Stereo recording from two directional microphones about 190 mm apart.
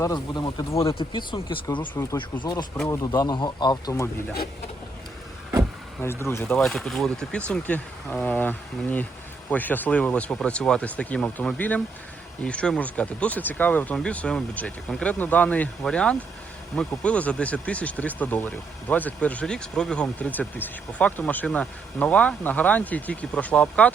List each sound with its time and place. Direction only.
0.0 s speech: 20° left (ahead or behind)
6.0 s speech: 15° left (ahead or behind)